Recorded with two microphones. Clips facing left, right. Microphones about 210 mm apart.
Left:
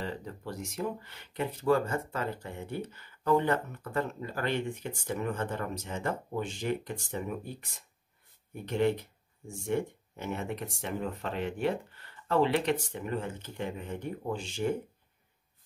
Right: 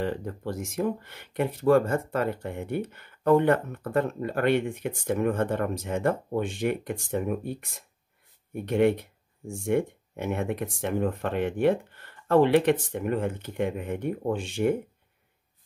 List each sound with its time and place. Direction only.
0.0 s speech: 50° right (ahead or behind)